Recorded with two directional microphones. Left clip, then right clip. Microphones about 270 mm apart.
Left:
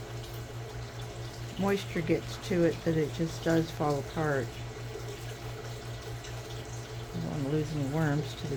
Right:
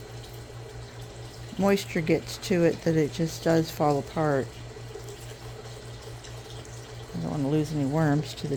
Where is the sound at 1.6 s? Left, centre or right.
Right.